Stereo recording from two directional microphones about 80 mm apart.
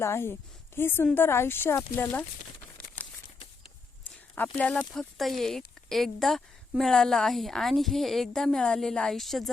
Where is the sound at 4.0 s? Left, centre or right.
Centre.